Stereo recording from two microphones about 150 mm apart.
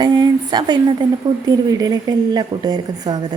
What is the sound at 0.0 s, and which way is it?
A woman's voice, 30° right (ahead or behind).